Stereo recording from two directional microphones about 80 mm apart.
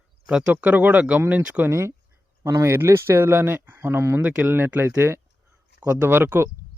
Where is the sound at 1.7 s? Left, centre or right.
Right.